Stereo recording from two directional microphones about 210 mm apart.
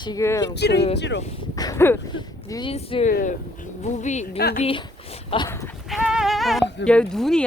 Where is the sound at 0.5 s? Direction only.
50° left (ahead or behind).